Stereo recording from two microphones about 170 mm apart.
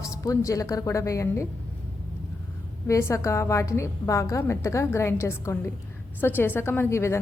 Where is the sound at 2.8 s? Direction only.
15° left (ahead or behind).